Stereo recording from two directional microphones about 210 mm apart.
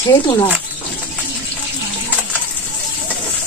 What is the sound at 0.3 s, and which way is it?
Speech, 10° left (ahead or behind).